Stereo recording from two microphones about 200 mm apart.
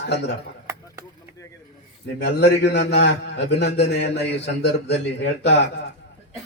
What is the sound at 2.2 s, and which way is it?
A man's voice, 55° left (ahead or behind).